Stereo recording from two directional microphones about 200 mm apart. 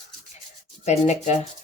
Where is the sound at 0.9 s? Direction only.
35° left (ahead or behind).